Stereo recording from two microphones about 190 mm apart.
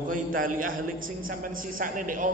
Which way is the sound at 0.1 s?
45° right (ahead or behind).